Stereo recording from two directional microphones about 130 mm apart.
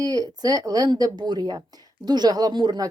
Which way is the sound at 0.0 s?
30° right (ahead or behind).